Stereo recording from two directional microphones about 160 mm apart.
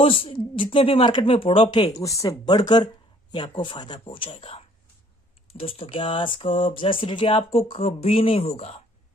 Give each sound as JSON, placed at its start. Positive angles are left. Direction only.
{"t": 0.0, "sound": "speech", "side_deg": 35}